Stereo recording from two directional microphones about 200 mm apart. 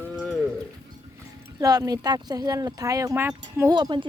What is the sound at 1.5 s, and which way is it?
Speech, 20° right (ahead or behind).